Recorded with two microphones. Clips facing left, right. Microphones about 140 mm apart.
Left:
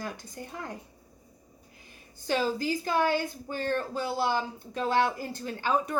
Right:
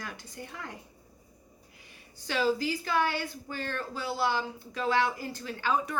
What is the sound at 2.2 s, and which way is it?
A woman's voice, 40° left (ahead or behind).